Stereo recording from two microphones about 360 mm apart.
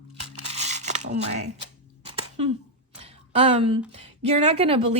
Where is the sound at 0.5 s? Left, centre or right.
Centre.